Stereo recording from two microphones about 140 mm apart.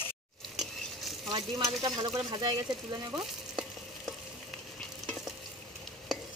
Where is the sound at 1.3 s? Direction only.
35° right (ahead or behind).